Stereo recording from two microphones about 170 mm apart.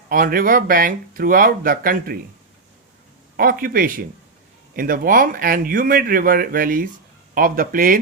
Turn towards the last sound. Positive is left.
turn(degrees=-55)  # may be behind; listen again after turning